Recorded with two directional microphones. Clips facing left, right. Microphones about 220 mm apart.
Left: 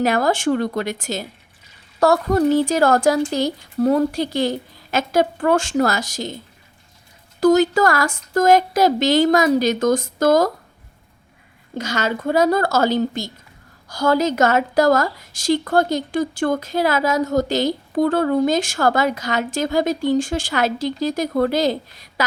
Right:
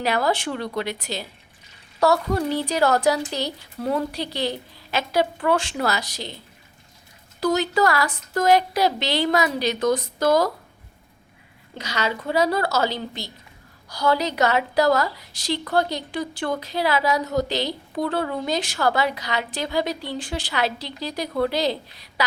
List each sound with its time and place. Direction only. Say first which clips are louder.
0.0 s a woman's voice: left 5 dB; 45° left (ahead or behind)
7.3 s a woman's voice: left 7 dB; 45° left (ahead or behind)
11.8 s a woman's voice: left 4 dB; 45° left (ahead or behind)